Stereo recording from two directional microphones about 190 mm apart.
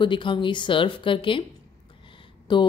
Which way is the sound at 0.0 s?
25° left (ahead or behind).